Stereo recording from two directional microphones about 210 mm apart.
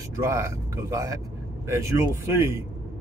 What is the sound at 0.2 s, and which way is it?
Speech, 15° right (ahead or behind).